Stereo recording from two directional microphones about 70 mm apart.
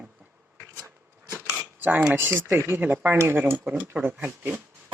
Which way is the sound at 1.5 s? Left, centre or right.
Right.